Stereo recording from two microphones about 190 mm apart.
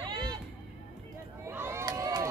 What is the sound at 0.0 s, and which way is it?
Music, 25° right (ahead or behind).